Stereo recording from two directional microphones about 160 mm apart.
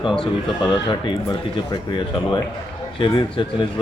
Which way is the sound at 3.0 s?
30° left (ahead or behind).